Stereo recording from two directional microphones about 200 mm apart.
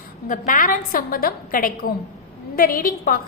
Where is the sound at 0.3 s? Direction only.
40° left (ahead or behind).